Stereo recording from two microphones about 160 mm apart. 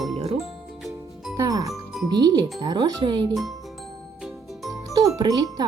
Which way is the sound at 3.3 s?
Centre (ahead or behind).